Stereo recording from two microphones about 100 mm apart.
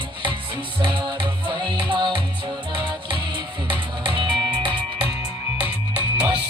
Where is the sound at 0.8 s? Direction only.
50° right (ahead or behind).